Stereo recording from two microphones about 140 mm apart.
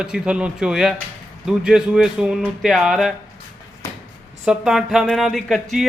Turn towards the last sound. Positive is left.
turn(degrees=0)  # may be behind; listen again after turning